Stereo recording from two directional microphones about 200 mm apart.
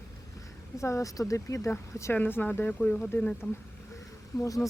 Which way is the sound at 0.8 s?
15° left (ahead or behind).